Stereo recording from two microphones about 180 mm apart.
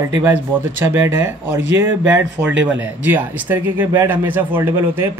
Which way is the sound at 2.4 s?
20° right (ahead or behind).